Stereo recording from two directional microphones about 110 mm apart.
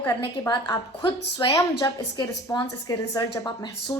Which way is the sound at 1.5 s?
35° left (ahead or behind).